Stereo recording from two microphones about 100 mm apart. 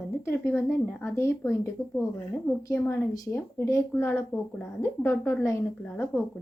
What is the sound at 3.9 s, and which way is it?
A woman's voice, 25° left (ahead or behind).